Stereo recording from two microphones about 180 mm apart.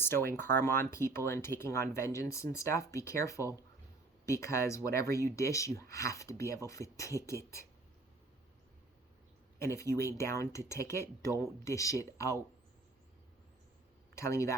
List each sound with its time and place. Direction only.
0.0 s speech: 15° left (ahead or behind)
9.6 s speech: 15° left (ahead or behind)
14.2 s speech: 15° left (ahead or behind)